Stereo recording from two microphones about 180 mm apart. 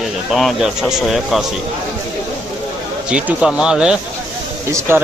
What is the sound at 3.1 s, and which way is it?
Speech, 5° right (ahead or behind).